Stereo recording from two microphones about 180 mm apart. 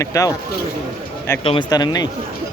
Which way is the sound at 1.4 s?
30° left (ahead or behind).